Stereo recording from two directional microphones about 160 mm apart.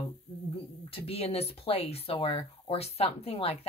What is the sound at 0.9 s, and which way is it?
Speech, 40° left (ahead or behind).